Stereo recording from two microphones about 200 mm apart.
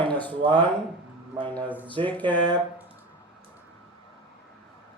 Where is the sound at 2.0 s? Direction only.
10° left (ahead or behind).